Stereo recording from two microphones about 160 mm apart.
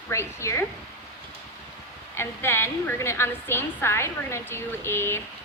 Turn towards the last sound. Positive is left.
turn(degrees=15)  # may be behind; listen again after turning